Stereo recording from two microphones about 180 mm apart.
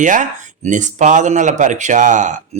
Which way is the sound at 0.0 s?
45° right (ahead or behind).